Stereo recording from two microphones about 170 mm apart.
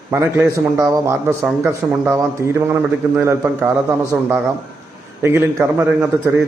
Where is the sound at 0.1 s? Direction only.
15° right (ahead or behind).